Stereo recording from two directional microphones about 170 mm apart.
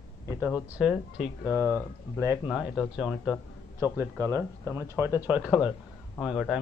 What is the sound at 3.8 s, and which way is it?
Speech, 15° right (ahead or behind).